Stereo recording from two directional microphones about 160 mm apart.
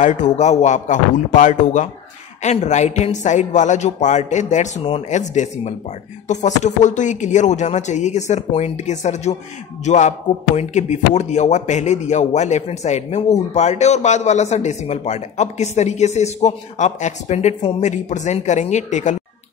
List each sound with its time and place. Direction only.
0.0 s a man's voice: 50° left (ahead or behind)